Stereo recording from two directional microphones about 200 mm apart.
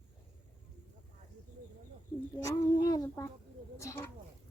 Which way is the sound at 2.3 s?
15° left (ahead or behind).